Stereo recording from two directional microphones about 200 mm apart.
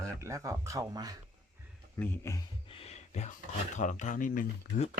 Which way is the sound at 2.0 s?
15° left (ahead or behind).